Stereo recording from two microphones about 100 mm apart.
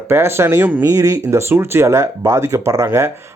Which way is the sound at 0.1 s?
25° right (ahead or behind).